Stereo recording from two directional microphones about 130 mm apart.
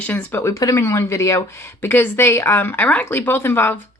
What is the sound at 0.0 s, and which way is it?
Speech, 10° left (ahead or behind).